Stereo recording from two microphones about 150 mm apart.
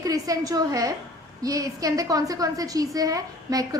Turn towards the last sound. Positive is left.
turn(degrees=-25)  # may be behind; listen again after turning